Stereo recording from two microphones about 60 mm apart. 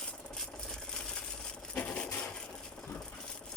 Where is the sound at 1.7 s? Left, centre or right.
Centre.